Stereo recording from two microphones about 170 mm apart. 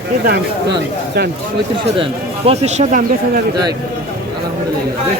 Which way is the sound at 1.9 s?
35° right (ahead or behind).